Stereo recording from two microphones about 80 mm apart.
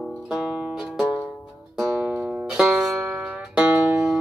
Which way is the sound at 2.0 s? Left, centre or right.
Right.